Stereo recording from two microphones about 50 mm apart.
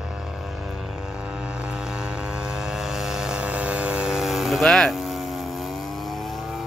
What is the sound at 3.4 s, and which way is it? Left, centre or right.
Vehicle, right.